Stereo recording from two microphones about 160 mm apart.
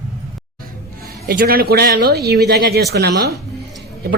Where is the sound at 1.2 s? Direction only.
70° right (ahead or behind).